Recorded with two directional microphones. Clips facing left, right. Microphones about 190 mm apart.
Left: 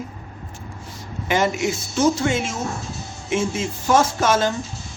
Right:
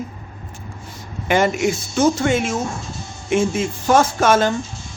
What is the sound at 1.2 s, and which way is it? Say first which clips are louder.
Speech: right 3 dB; 55° right (ahead or behind).